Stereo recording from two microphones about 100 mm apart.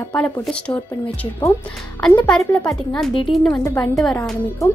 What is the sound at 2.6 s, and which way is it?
Speech, 10° left (ahead or behind).